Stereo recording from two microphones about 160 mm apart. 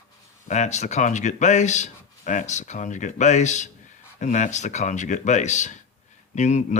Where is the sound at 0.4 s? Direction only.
45° left (ahead or behind).